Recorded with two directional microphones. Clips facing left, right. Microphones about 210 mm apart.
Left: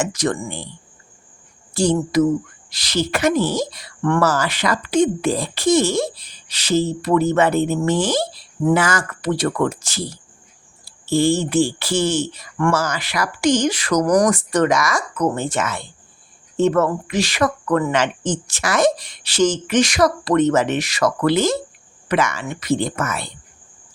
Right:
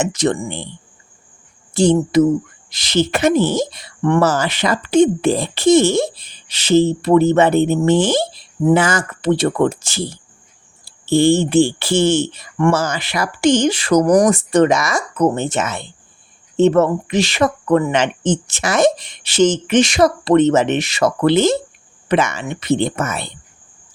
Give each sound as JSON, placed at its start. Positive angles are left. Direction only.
{"t": 0.0, "sound": "a woman's voice", "side_deg": -25}
{"t": 1.7, "sound": "a woman's voice", "side_deg": -20}